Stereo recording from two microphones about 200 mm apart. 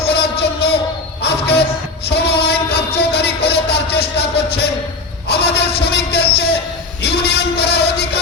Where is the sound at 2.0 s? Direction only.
55° left (ahead or behind).